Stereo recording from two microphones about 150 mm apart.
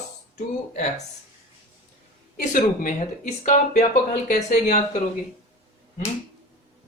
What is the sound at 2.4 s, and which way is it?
Speech, 60° left (ahead or behind).